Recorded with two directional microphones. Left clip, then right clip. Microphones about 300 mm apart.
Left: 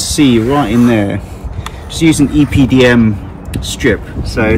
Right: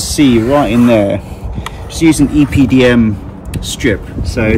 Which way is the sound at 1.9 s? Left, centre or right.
Centre.